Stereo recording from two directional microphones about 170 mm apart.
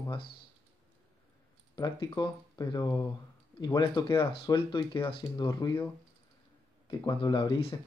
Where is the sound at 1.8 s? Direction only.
25° left (ahead or behind).